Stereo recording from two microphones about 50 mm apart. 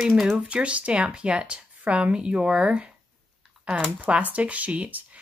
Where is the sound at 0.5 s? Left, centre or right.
Right.